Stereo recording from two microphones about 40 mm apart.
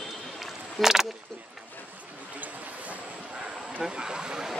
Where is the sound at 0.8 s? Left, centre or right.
Centre.